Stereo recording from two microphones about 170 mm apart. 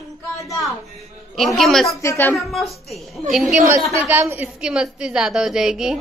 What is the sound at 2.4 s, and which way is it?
A woman's voice, centre (ahead or behind).